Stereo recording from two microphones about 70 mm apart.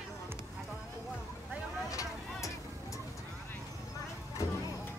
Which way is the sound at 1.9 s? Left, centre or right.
Left.